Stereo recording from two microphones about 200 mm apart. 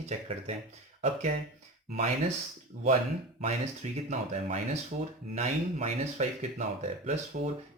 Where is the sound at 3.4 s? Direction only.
35° right (ahead or behind).